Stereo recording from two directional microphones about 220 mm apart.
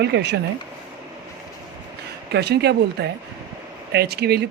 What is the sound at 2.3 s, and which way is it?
Speech, 50° right (ahead or behind).